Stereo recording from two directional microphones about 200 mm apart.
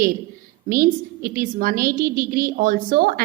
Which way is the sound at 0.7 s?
45° right (ahead or behind).